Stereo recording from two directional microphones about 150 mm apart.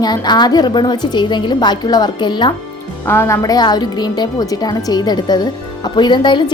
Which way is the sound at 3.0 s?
15° left (ahead or behind).